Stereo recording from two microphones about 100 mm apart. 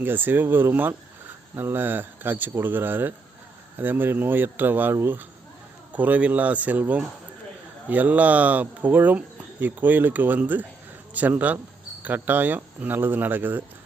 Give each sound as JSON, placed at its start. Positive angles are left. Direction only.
{"t": 0.0, "sound": "speech", "side_deg": -20}